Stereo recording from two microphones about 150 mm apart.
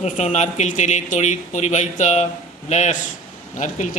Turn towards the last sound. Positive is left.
turn(degrees=55)  # may be behind; listen again after turning